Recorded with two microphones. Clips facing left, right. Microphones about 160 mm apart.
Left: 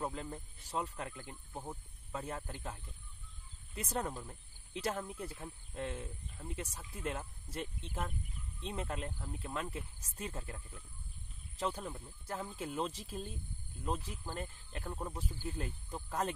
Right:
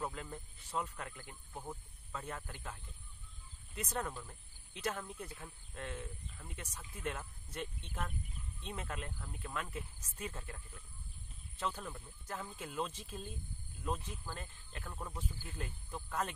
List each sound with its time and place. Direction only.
0.0 s speech: 25° left (ahead or behind)
4.1 s speech: 20° left (ahead or behind)
4.7 s speech: 30° left (ahead or behind)
11.7 s speech: 15° left (ahead or behind)
12.3 s speech: 30° left (ahead or behind)